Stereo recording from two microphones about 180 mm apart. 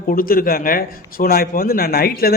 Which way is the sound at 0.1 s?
50° left (ahead or behind).